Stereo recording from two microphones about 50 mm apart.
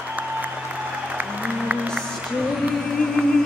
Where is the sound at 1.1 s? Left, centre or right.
Right.